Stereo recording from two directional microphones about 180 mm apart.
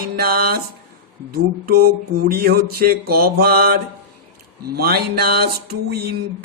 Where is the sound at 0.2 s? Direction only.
55° right (ahead or behind).